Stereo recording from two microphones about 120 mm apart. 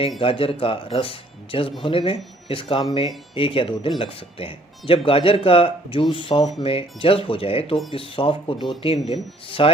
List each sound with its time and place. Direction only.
0.2 s speech: 50° left (ahead or behind)